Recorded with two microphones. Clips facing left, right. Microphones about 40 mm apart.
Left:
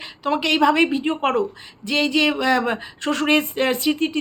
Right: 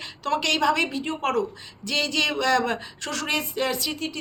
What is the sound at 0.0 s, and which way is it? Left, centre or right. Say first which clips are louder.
A woman's voice: left 3 dB; centre.